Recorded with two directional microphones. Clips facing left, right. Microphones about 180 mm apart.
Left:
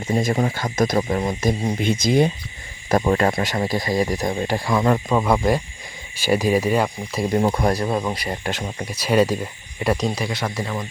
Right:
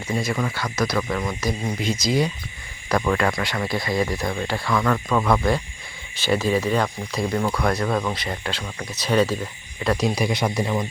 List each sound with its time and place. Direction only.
0.2 s speech: 45° left (ahead or behind)
0.9 s speech: 30° left (ahead or behind)
1.8 s speech: 55° left (ahead or behind)
3.0 s speech: 30° left (ahead or behind)
4.3 s speech: 15° left (ahead or behind)
7.3 s speech: 30° left (ahead or behind)
7.9 s speech: 15° left (ahead or behind)
10.0 s speech: 15° right (ahead or behind)